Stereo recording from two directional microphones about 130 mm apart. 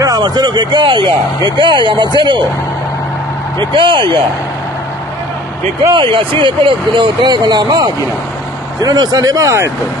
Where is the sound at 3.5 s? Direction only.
40° right (ahead or behind).